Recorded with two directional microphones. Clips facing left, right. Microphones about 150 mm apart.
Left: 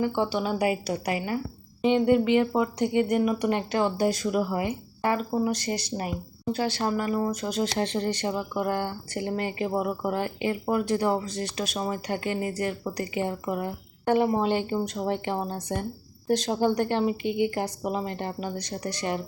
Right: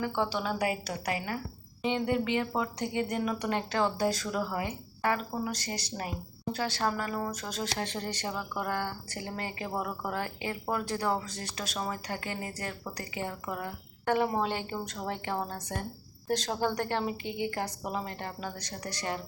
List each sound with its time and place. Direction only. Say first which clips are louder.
0.0 s speech: left 5 dB; 15° left (ahead or behind)